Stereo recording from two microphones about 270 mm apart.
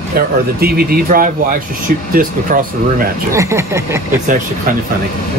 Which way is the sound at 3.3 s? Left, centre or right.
Centre.